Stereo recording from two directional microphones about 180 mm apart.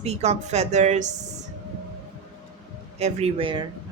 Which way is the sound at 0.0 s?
40° right (ahead or behind).